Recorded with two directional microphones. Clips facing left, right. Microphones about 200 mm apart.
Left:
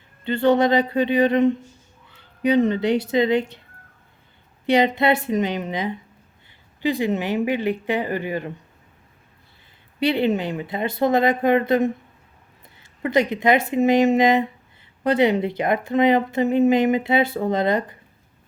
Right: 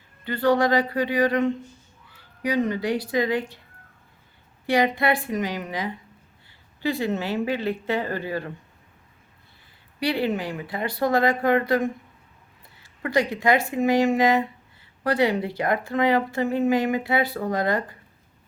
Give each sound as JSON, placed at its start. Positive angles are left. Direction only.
{"t": 0.3, "sound": "a woman's voice", "side_deg": 25}
{"t": 4.6, "sound": "a woman's voice", "side_deg": 20}
{"t": 10.0, "sound": "a woman's voice", "side_deg": 20}